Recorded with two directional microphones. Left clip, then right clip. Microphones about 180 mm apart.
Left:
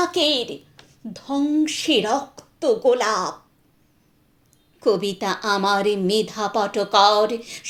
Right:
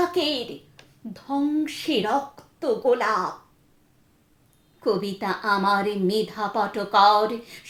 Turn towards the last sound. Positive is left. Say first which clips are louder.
# left 2 dB
turn(degrees=25)  # may be behind; listen again after turning